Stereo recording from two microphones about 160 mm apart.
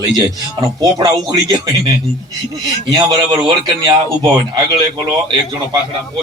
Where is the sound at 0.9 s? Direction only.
25° right (ahead or behind).